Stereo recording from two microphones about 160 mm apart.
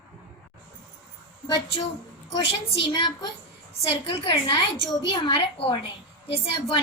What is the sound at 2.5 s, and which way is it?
A woman's voice, 30° left (ahead or behind).